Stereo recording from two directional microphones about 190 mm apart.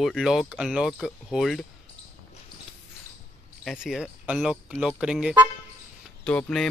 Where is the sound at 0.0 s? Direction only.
Centre (ahead or behind).